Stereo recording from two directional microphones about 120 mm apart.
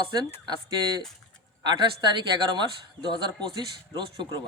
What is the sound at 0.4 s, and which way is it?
Speech, 40° right (ahead or behind).